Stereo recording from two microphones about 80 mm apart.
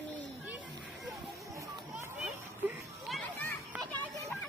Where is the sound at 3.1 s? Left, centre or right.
Centre.